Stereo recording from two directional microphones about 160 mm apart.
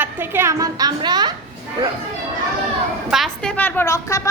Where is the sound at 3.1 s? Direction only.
Centre (ahead or behind); by 4.3 s 20° left (ahead or behind).